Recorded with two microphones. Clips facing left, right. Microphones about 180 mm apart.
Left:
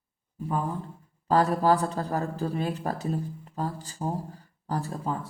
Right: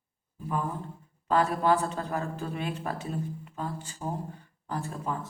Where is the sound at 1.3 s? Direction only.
35° left (ahead or behind).